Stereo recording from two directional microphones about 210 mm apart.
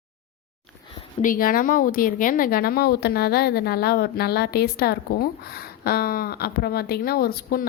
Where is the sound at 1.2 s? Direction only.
40° left (ahead or behind).